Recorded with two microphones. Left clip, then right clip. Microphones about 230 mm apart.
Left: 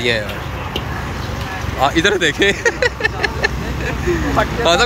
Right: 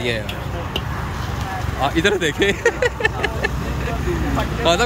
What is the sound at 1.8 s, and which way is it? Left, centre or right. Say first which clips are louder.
Speech: left 4 dB; centre.